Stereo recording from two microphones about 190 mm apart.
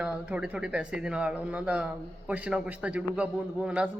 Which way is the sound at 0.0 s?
5° right (ahead or behind).